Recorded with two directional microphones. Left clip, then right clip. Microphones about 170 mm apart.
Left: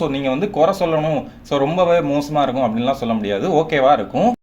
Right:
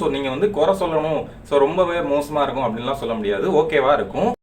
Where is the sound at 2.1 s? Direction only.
35° left (ahead or behind).